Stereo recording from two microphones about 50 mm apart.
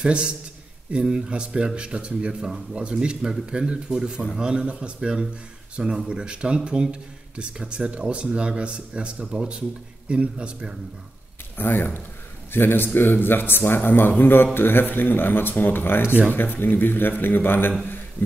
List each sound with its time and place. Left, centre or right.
0.0 s speech: centre
11.5 s a man's voice: left